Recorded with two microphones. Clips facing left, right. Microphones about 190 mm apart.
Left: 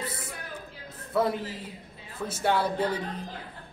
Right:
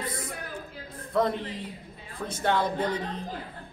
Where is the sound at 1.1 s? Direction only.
5° left (ahead or behind).